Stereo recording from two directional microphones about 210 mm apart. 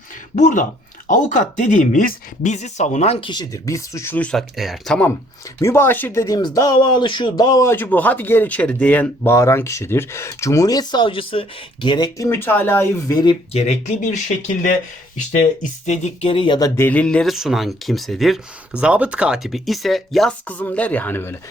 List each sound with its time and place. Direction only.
0.3 s speech: 35° left (ahead or behind); by 13.1 s 10° left (ahead or behind)
13.2 s speech: 30° left (ahead or behind)
15.9 s speech: 30° left (ahead or behind); by 21.3 s 10° left (ahead or behind)